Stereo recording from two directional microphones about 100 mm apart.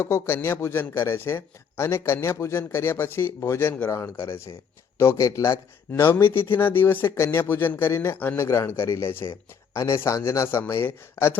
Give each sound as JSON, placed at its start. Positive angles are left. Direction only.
{"t": 0.0, "sound": "a man's voice", "side_deg": 25}